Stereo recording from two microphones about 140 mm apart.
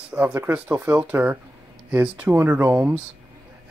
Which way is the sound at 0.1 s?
15° right (ahead or behind).